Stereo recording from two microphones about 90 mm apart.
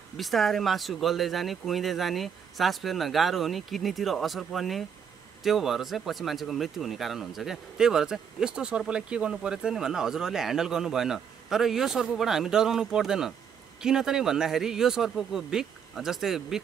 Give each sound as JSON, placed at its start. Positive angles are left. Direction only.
{"t": 0.2, "sound": "speech", "side_deg": 0}